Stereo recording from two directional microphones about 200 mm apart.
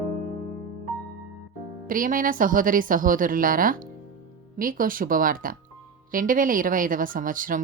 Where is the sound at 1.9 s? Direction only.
45° right (ahead or behind).